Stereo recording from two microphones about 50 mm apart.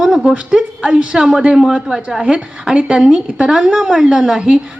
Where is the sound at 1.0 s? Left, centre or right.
Right.